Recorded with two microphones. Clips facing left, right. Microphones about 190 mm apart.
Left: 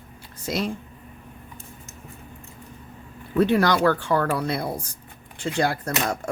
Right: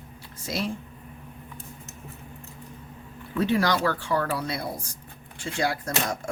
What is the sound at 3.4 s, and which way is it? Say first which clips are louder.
Speech: left 4 dB; 60° left (ahead or behind).